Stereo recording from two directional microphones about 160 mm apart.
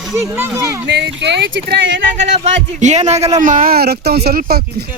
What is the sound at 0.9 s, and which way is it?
Speech, 90° right.